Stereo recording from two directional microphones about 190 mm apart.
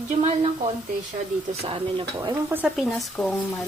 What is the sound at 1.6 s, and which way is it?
Speech, 25° right (ahead or behind).